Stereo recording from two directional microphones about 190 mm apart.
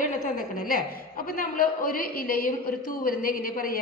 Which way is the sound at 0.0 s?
50° left (ahead or behind).